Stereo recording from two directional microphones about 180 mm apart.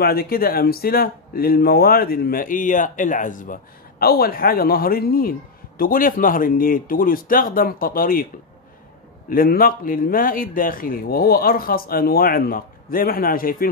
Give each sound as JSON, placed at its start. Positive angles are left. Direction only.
{"t": 0.0, "sound": "speech", "side_deg": 60}
{"t": 9.3, "sound": "speech", "side_deg": 55}